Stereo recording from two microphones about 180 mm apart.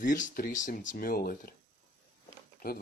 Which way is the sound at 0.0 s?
45° left (ahead or behind).